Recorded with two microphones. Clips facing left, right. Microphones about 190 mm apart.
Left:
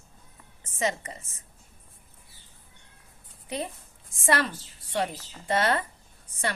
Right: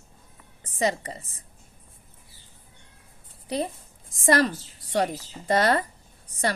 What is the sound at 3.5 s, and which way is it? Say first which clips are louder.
A woman's voice: right 5 dB; 35° right (ahead or behind).